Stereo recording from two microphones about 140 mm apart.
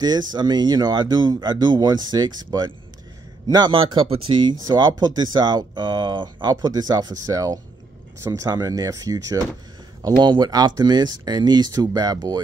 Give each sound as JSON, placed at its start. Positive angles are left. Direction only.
{"t": 0.0, "sound": "speech", "side_deg": -30}